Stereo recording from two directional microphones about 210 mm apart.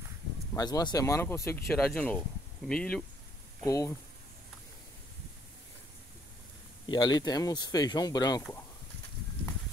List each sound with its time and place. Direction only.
0.6 s speech: 20° left (ahead or behind)
3.6 s speech: 15° left (ahead or behind)
6.9 s speech: 20° left (ahead or behind)